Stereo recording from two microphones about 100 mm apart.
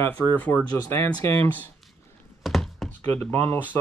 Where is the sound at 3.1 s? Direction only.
20° left (ahead or behind).